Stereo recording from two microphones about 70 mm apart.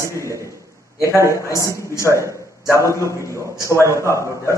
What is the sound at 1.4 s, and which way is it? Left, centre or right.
Speech, left.